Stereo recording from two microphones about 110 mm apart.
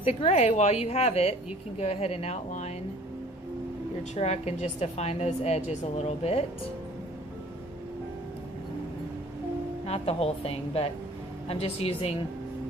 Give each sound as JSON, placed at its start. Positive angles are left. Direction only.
{"t": 0.0, "sound": "a woman's voice", "side_deg": 70}
{"t": 4.1, "sound": "a woman's voice", "side_deg": 85}
{"t": 9.8, "sound": "a woman's voice", "side_deg": 65}